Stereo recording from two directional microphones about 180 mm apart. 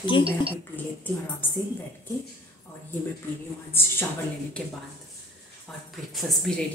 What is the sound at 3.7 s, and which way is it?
Speech, 15° left (ahead or behind).